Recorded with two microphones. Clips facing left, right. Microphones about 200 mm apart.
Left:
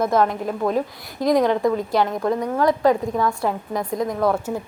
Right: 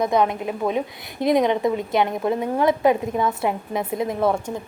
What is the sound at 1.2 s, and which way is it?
A woman's voice, 25° right (ahead or behind).